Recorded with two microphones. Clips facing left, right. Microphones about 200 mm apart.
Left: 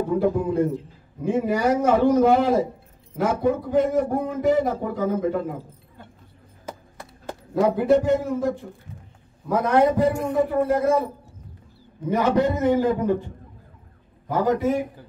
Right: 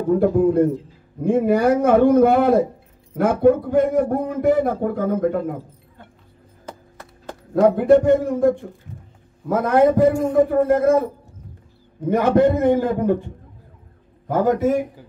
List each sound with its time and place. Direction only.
0.2 s speech: 55° right (ahead or behind)
7.6 s speech: 55° right (ahead or behind)
12.1 s speech: 55° right (ahead or behind)
14.3 s speech: 50° right (ahead or behind)